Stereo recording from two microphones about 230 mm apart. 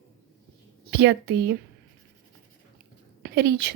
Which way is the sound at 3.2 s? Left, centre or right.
Right.